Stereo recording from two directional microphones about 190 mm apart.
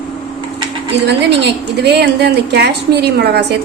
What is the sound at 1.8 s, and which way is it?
A woman's voice, 60° right (ahead or behind).